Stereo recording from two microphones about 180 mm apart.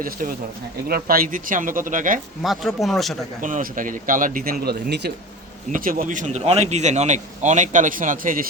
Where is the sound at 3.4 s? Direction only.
45° right (ahead or behind); by 5.1 s 65° right (ahead or behind).